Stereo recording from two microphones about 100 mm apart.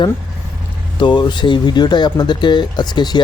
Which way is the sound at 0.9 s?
55° left (ahead or behind).